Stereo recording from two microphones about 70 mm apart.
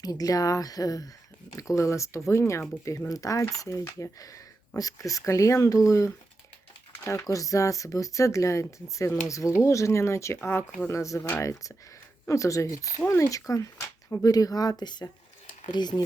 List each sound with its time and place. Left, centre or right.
0.0 s speech: left
12.3 s speech: left